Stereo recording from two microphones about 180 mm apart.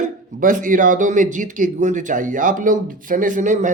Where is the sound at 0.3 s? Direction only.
50° right (ahead or behind).